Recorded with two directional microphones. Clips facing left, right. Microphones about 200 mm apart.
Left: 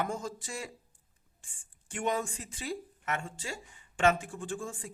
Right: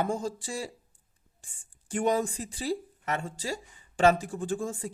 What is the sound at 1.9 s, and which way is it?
Speech, 35° right (ahead or behind).